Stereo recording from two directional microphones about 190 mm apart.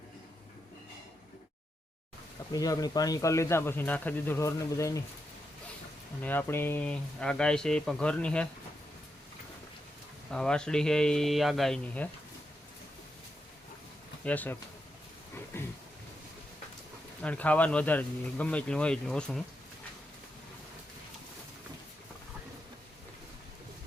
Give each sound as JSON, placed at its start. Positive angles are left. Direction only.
{"t": 2.5, "sound": "speech", "side_deg": 20}
{"t": 6.2, "sound": "speech", "side_deg": 10}
{"t": 10.3, "sound": "speech", "side_deg": 5}
{"t": 14.3, "sound": "speech", "side_deg": 10}
{"t": 17.2, "sound": "speech", "side_deg": 5}